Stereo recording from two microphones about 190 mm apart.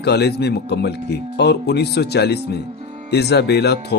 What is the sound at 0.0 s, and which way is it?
Speech, 60° left (ahead or behind).